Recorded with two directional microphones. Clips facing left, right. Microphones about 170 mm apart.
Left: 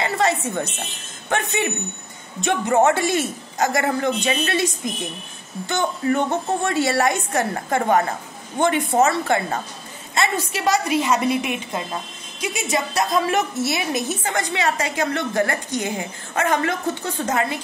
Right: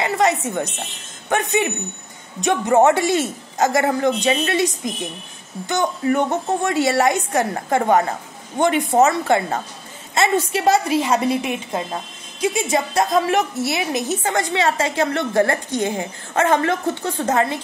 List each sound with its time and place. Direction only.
0.0 s a sound: 20° right (ahead or behind)
1.3 s a woman's voice: 20° right (ahead or behind)
13.3 s a woman's voice: 15° right (ahead or behind)